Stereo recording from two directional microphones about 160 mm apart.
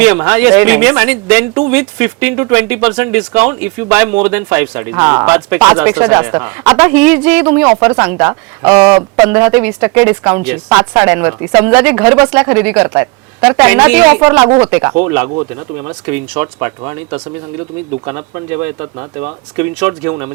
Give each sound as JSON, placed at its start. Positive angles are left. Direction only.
{"t": 0.0, "sound": "speech", "side_deg": -10}
{"t": 14.1, "sound": "speech", "side_deg": -30}
{"t": 14.6, "sound": "speech", "side_deg": -10}